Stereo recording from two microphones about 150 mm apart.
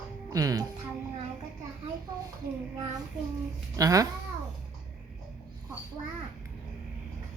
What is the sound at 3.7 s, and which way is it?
Speech, 25° right (ahead or behind).